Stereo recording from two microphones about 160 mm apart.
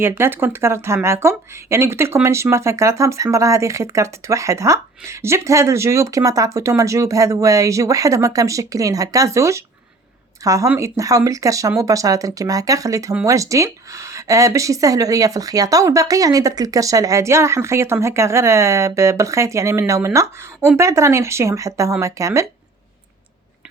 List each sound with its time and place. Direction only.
0.0 s speech: 15° right (ahead or behind)